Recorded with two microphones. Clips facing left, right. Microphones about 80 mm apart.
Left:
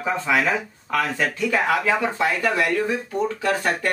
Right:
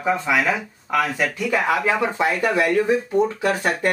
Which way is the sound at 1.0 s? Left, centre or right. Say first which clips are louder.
Left 2 dB; centre.